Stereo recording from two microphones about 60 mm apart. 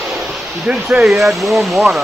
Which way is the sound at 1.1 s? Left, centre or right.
Centre.